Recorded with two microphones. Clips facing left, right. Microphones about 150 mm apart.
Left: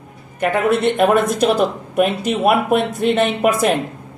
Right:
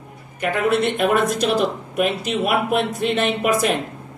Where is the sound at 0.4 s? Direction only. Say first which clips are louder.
Left 3 dB; 50° left (ahead or behind).